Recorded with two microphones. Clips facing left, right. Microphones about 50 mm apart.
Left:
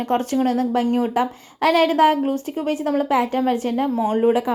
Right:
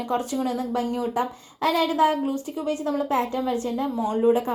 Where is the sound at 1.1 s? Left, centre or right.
Left.